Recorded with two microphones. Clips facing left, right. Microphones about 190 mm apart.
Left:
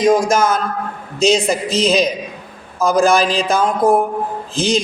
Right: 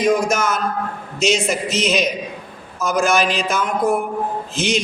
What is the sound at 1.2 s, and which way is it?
Speech, 35° left (ahead or behind).